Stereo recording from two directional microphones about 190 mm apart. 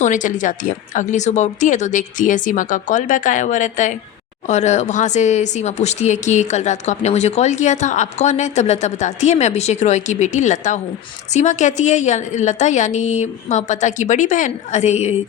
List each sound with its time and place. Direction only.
0.0 s speech: 40° left (ahead or behind)